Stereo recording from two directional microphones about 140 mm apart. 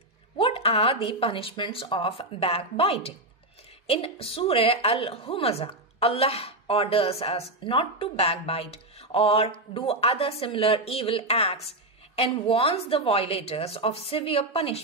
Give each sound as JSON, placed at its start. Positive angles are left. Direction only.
{"t": 0.4, "sound": "a woman's voice", "side_deg": 45}